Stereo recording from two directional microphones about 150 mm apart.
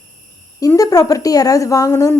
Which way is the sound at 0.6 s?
20° left (ahead or behind).